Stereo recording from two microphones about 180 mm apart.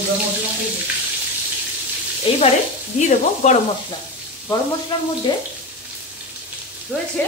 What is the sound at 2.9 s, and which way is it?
Sizzle, 40° left (ahead or behind).